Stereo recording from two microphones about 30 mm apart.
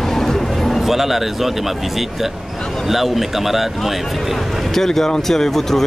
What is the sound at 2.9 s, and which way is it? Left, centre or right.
Speech, centre.